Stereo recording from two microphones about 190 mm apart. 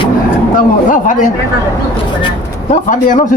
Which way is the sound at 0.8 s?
45° left (ahead or behind).